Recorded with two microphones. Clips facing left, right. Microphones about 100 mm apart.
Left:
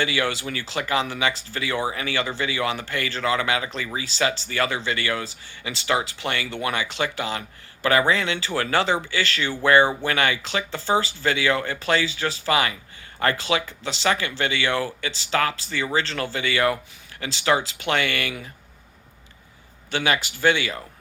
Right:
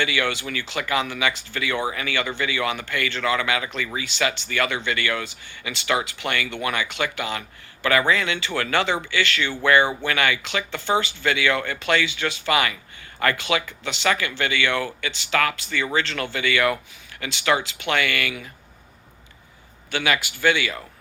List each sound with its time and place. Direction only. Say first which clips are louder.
0.0 s speech: even; 35° left (ahead or behind)
19.9 s speech: even; 35° left (ahead or behind)